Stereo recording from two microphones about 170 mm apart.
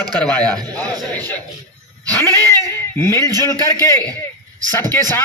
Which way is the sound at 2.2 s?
20° right (ahead or behind).